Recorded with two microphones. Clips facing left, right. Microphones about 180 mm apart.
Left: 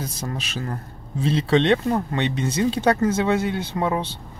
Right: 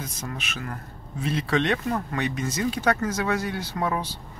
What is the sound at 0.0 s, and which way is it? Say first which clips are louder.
Speech: left 4 dB; 35° left (ahead or behind).